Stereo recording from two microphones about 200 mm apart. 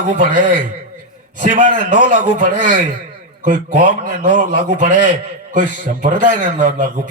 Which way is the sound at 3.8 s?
65° left (ahead or behind).